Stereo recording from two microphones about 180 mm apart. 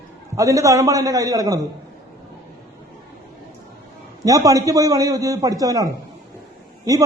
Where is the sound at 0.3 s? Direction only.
15° right (ahead or behind).